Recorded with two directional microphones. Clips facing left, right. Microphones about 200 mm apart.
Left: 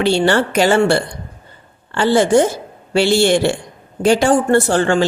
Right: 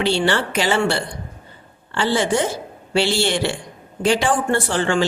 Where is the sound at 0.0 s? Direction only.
45° left (ahead or behind).